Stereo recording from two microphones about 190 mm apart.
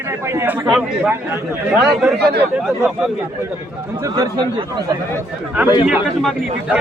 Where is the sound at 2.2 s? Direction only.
60° right (ahead or behind).